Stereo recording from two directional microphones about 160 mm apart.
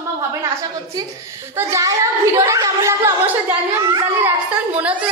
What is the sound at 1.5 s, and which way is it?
A woman's voice, 20° right (ahead or behind).